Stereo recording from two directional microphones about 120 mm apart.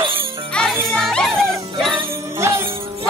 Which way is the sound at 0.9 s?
Centre (ahead or behind).